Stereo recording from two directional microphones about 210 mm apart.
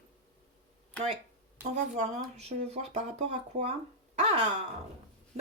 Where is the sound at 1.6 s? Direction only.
35° right (ahead or behind).